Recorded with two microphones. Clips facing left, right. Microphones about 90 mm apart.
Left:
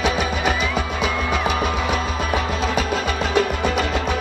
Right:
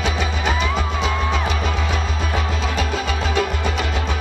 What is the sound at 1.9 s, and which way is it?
Music, 60° left (ahead or behind).